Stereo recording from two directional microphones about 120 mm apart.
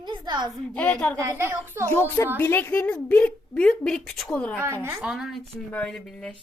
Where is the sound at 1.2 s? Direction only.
25° right (ahead or behind).